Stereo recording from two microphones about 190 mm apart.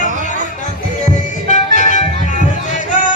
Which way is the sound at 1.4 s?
40° left (ahead or behind).